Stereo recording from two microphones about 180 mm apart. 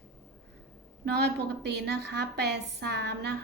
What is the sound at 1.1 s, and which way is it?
A woman's voice, 65° right (ahead or behind).